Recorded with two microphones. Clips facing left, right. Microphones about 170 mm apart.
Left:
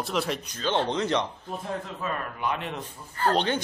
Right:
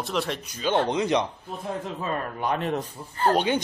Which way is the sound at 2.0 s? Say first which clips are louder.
Right 3 dB; 40° right (ahead or behind).